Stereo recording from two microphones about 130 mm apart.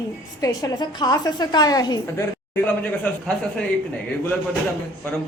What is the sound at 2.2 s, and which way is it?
Speech, 15° left (ahead or behind).